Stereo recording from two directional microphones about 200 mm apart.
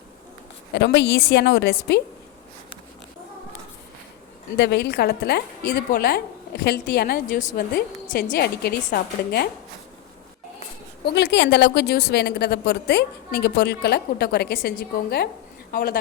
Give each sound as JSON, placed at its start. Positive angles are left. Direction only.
{"t": 0.7, "sound": "a woman's voice", "side_deg": 60}
{"t": 4.5, "sound": "a woman's voice", "side_deg": 60}
{"t": 11.0, "sound": "a woman's voice", "side_deg": 55}